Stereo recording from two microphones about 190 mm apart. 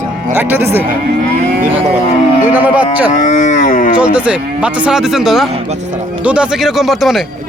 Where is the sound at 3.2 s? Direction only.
40° left (ahead or behind).